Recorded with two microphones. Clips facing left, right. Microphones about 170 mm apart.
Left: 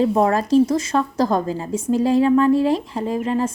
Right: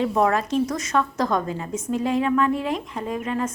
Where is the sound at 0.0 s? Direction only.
30° left (ahead or behind).